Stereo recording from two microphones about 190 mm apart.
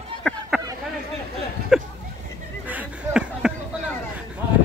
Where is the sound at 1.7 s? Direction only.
5° right (ahead or behind).